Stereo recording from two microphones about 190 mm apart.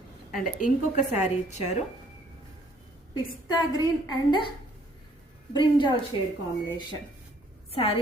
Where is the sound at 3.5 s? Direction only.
20° left (ahead or behind).